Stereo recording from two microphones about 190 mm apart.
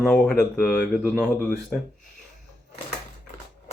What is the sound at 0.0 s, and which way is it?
Speech, centre (ahead or behind).